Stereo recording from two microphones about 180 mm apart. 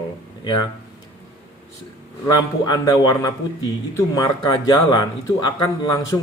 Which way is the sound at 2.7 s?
20° left (ahead or behind).